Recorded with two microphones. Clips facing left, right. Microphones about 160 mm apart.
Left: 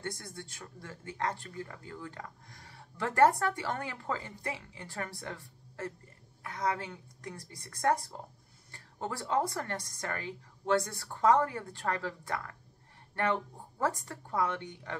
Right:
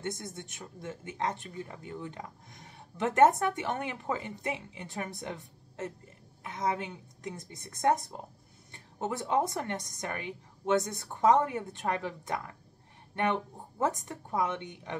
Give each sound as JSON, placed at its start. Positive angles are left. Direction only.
{"t": 0.0, "sound": "speech", "side_deg": -20}